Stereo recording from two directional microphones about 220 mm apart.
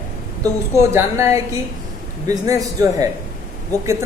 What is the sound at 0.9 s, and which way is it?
A man's voice, 10° right (ahead or behind).